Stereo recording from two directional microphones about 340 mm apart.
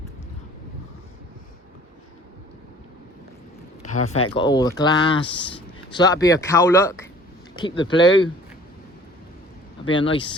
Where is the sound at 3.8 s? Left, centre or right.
Left.